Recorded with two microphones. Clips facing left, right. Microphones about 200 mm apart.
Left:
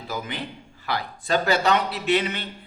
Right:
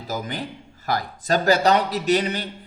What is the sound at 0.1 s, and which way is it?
Speech, 40° right (ahead or behind).